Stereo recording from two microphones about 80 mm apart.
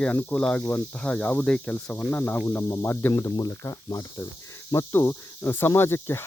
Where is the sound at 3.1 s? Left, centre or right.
Left.